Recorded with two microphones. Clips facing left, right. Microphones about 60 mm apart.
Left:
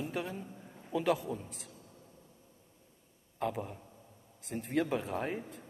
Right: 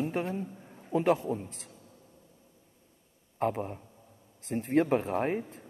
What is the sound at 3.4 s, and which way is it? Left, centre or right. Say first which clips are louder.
A man's voice: right 5 dB; right.